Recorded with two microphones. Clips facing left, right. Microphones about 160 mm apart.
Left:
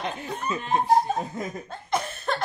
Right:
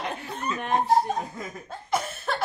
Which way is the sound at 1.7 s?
5° right (ahead or behind).